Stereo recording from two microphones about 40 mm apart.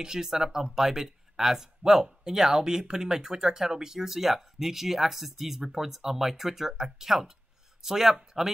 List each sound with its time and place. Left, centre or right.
0.0 s speech: centre